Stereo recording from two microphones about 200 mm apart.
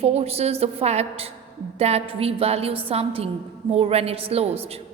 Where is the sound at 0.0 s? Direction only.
30° right (ahead or behind).